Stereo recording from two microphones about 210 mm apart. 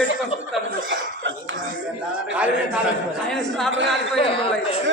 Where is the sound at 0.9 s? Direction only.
60° right (ahead or behind).